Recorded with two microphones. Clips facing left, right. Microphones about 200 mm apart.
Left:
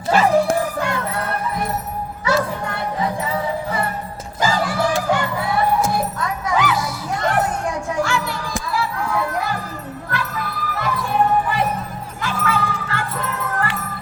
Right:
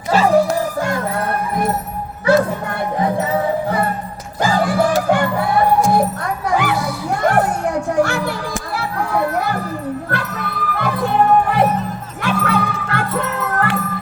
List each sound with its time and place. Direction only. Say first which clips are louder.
0.1 s music: right 2 dB; 35° right (ahead or behind)
2.3 s music: right 6 dB; 55° right (ahead or behind)
8.7 s children playing: right 1 dB; 60° right (ahead or behind)
10.1 s music: right 2 dB; 65° right (ahead or behind)